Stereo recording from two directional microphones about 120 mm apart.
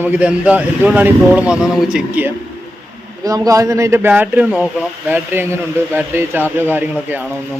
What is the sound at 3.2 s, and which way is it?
A man's voice, 30° right (ahead or behind).